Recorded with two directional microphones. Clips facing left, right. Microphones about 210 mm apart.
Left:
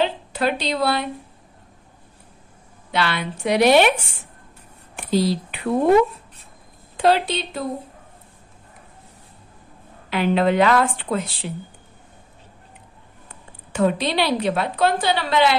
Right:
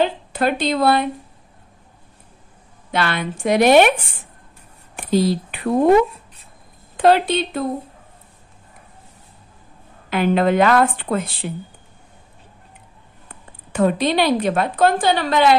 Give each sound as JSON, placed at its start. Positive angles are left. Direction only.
{"t": 0.0, "sound": "speech", "side_deg": -50}
{"t": 2.9, "sound": "a woman's voice", "side_deg": -50}
{"t": 4.9, "sound": "a sound", "side_deg": -50}
{"t": 7.0, "sound": "a woman's voice", "side_deg": -55}
{"t": 10.0, "sound": "a woman's voice", "side_deg": -45}
{"t": 13.7, "sound": "a woman's voice", "side_deg": -50}